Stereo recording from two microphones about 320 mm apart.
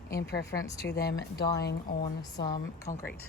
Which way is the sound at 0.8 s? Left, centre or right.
Left.